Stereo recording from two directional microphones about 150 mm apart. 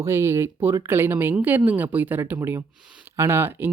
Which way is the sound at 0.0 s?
15° right (ahead or behind).